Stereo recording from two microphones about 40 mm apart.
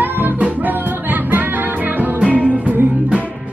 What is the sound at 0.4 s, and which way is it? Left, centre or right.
Music, right.